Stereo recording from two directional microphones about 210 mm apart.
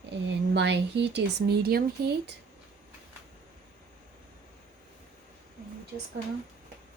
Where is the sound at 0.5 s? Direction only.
55° right (ahead or behind).